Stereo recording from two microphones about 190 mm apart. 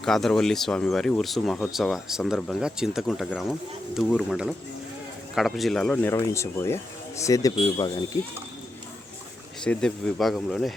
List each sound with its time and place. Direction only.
0.0 s speech: centre (ahead or behind); by 8.2 s 15° left (ahead or behind)
9.6 s speech: centre (ahead or behind)